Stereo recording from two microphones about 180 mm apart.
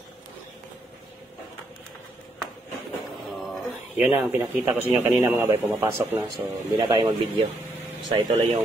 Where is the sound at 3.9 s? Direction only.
10° right (ahead or behind); by 7.5 s 25° right (ahead or behind).